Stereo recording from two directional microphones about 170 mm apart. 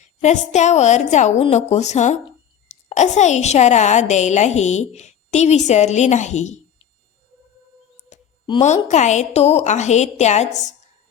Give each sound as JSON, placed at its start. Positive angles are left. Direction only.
{"t": 0.0, "sound": "a woman's voice", "side_deg": 45}
{"t": 8.1, "sound": "a sound", "side_deg": 45}
{"t": 8.9, "sound": "a woman's voice", "side_deg": 45}